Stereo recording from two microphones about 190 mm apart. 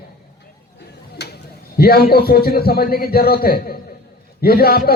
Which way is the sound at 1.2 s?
65° left (ahead or behind).